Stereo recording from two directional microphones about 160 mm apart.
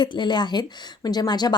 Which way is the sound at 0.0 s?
30° left (ahead or behind).